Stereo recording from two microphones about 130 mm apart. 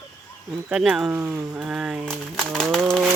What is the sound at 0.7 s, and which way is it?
Speech, 5° right (ahead or behind).